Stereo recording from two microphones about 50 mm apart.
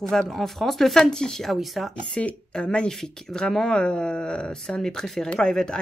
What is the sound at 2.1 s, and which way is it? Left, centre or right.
Speech, left.